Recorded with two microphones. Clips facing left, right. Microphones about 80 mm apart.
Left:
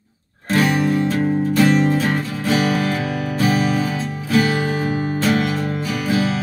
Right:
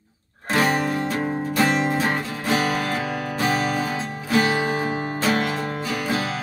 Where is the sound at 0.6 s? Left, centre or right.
Right.